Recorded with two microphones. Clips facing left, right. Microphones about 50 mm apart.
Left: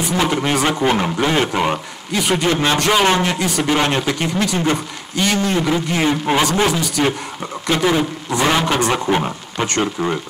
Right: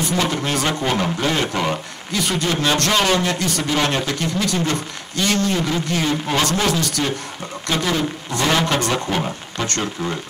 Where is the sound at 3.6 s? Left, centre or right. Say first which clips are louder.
Left 3 dB; left.